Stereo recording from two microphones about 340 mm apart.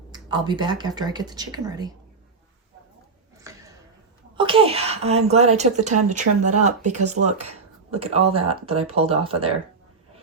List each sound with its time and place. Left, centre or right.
0.1 s speech: centre
3.3 s a sound: centre
4.4 s a child's voice: centre